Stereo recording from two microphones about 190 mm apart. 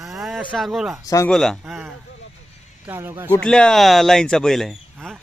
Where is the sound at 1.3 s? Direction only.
Centre (ahead or behind).